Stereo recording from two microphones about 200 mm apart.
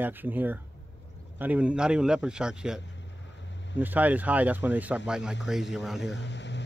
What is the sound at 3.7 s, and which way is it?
A man's voice, 10° right (ahead or behind).